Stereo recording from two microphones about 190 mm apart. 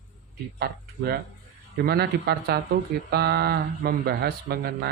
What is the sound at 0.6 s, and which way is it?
Speech, 55° right (ahead or behind).